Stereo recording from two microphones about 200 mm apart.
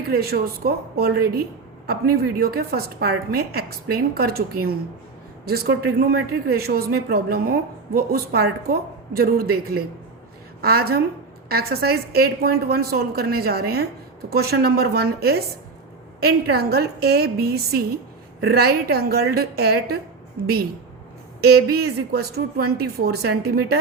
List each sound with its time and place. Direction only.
0.1 s speech: 50° right (ahead or behind)
21.4 s speech: 50° right (ahead or behind)